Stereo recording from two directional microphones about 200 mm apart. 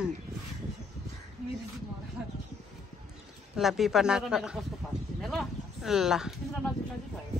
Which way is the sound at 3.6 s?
Centre (ahead or behind).